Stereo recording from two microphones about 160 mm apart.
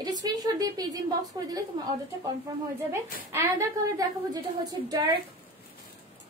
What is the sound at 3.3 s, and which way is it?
Speech, 20° right (ahead or behind).